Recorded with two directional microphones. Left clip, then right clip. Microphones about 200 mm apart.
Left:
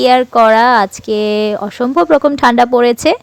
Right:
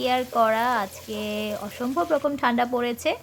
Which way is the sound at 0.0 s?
45° left (ahead or behind).